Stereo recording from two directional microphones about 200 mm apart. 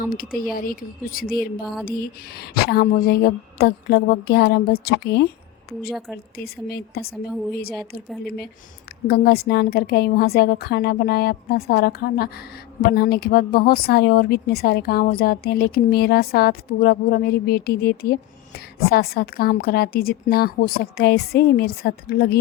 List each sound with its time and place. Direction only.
0.0 s speech: 45° left (ahead or behind)
6.3 s speech: 50° left (ahead or behind)
9.0 s speech: 50° left (ahead or behind)